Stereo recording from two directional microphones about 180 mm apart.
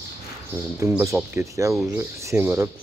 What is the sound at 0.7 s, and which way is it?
Speech, 15° right (ahead or behind).